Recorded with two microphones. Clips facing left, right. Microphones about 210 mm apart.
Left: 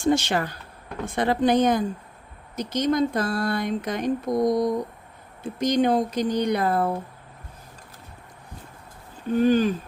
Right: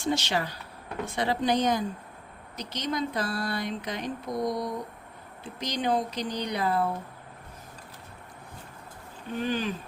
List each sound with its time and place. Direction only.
0.0 s speech: 50° left (ahead or behind)
9.4 s speech: 45° left (ahead or behind)